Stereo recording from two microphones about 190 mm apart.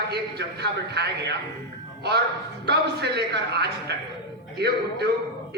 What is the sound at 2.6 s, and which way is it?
A man's voice, 60° right (ahead or behind).